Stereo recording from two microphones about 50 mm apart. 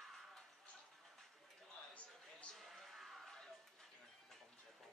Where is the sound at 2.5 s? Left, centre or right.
Centre.